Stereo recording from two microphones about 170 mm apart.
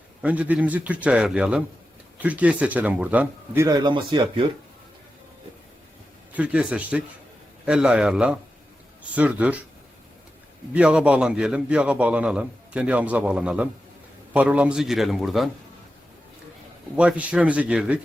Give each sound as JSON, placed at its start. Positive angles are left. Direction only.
{"t": 0.2, "sound": "a man's voice", "side_deg": -10}
{"t": 6.3, "sound": "a man's voice", "side_deg": -10}
{"t": 10.8, "sound": "a man's voice", "side_deg": -5}
{"t": 17.0, "sound": "a man's voice", "side_deg": -5}